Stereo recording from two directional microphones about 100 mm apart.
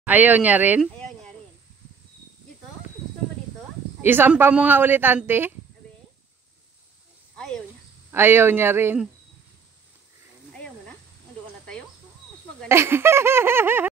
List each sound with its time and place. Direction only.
0.0 s speech: 15° right (ahead or behind)
0.9 s a sound: 5° left (ahead or behind)
4.0 s speech: 20° right (ahead or behind)
4.4 s laughter: 15° right (ahead or behind)
7.3 s speech: 5° left (ahead or behind)
8.1 s laughter: 20° right (ahead or behind)
10.5 s snake: 10° left (ahead or behind)
12.6 s laughter: 25° right (ahead or behind)